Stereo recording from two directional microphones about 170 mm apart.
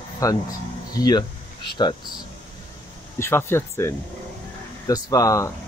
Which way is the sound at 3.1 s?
15° left (ahead or behind).